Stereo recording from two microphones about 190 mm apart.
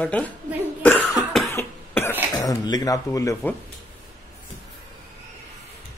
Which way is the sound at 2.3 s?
20° left (ahead or behind).